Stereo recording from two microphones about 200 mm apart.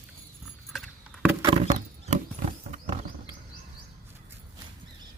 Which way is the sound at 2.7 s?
35° right (ahead or behind).